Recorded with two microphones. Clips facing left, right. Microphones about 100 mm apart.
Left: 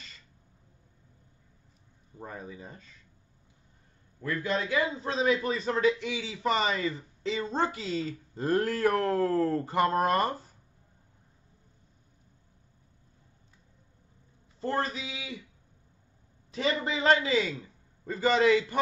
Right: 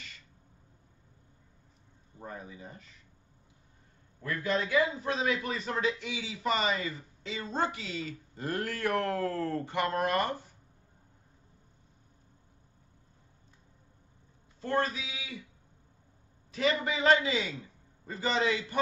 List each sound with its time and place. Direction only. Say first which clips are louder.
2.3 s a man's voice: left 3 dB; 30° left (ahead or behind)
4.2 s a man's voice: left 1 dB; 25° left (ahead or behind)
14.6 s speech: even; 35° left (ahead or behind)
16.5 s speech: even; 25° left (ahead or behind)
18.1 s a man's voice: left 6 dB; 30° right (ahead or behind)